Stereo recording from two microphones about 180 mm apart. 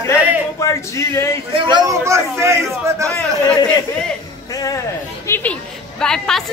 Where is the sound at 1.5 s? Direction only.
25° right (ahead or behind).